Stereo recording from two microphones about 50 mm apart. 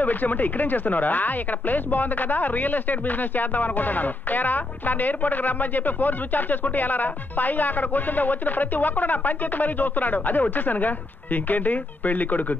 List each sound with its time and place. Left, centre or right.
0.0 s speech: left